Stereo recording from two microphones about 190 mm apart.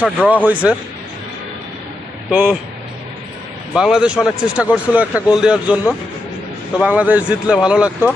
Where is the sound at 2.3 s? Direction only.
5° right (ahead or behind).